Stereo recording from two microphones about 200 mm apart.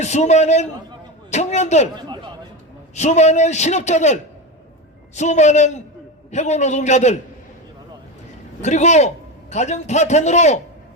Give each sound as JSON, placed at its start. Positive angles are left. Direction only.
{"t": 0.0, "sound": "a man's voice", "side_deg": 35}
{"t": 2.0, "sound": "a sound", "side_deg": -20}
{"t": 2.9, "sound": "a man's voice", "side_deg": 35}
{"t": 8.6, "sound": "a man's voice", "side_deg": 35}